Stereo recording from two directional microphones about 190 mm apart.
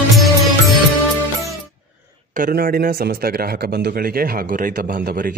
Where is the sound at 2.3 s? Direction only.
50° right (ahead or behind).